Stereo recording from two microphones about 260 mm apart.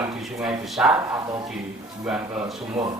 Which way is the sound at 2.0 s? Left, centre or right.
Centre.